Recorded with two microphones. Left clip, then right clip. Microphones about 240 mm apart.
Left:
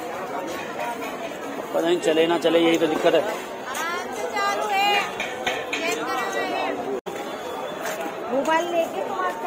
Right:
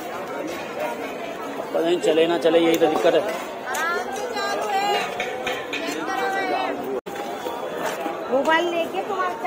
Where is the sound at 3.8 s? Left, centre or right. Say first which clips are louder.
Right 2 dB; centre.